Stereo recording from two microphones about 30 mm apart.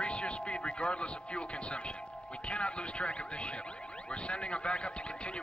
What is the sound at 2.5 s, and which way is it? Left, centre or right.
Speech, left.